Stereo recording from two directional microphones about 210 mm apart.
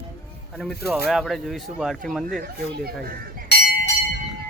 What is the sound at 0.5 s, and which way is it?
Speech, centre (ahead or behind).